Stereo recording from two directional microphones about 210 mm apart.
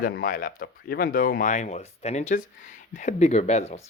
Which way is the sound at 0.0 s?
45° left (ahead or behind).